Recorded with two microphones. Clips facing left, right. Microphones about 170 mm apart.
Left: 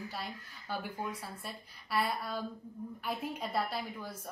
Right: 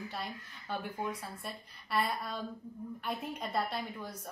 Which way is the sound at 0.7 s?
5° left (ahead or behind).